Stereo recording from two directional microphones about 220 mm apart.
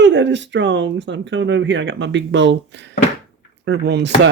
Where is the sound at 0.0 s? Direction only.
55° right (ahead or behind).